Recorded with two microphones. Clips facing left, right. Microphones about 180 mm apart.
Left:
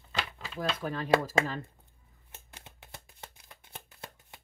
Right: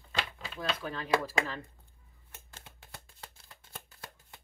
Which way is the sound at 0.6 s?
45° left (ahead or behind).